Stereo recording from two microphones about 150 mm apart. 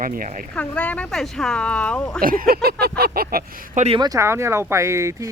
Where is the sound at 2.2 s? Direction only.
70° right (ahead or behind).